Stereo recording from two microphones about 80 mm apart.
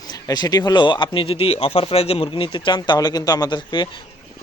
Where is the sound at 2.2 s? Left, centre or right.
Left.